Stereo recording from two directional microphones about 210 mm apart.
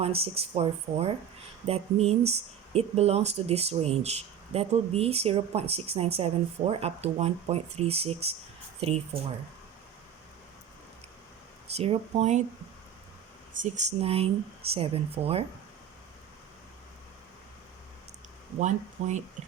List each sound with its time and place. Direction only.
0.0 s speech: 30° right (ahead or behind)
11.7 s speech: 30° right (ahead or behind)
13.6 s speech: 30° right (ahead or behind)
18.6 s speech: 35° right (ahead or behind)